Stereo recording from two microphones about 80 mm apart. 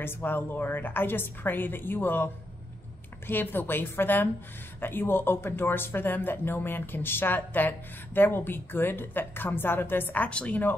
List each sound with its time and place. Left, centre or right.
0.0 s speech: left